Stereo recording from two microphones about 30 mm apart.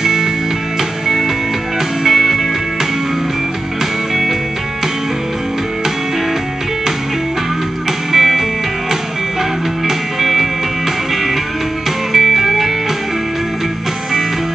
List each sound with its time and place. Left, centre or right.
0.0 s music: centre
1.0 s music: centre
8.1 s music: centre
9.8 s music: centre
12.1 s music: centre